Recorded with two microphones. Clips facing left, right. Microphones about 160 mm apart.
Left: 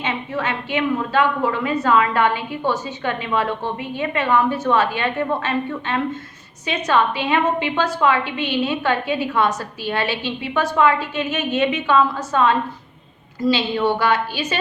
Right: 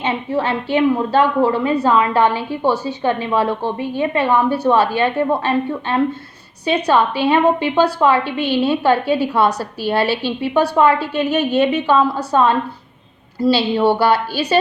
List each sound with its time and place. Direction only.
0.0 s a woman's voice: 30° right (ahead or behind)